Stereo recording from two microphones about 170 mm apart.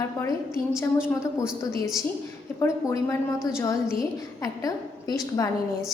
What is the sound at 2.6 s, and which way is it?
A woman's voice, 15° left (ahead or behind).